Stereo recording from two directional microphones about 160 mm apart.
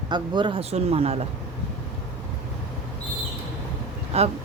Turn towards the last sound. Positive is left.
turn(degrees=-40)  # may be behind; listen again after turning